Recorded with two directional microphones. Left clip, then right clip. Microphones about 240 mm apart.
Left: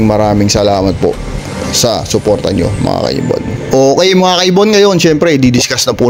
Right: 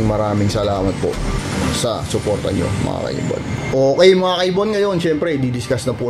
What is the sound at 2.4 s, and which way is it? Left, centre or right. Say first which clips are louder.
A man's voice: left 7 dB; left.